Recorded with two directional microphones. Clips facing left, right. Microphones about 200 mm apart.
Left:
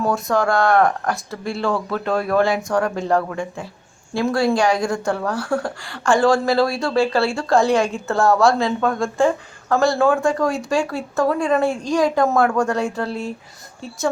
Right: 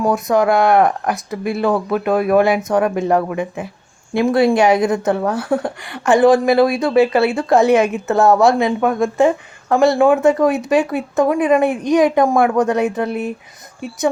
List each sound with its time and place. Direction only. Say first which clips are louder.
0.0 s speech: right 4 dB; 20° right (ahead or behind)